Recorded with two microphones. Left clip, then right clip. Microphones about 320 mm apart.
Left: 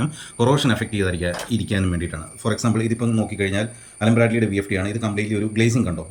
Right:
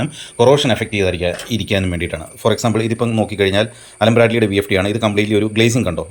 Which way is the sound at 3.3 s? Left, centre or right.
Centre.